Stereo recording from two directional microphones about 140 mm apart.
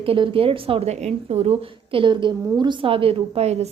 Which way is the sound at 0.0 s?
40° right (ahead or behind).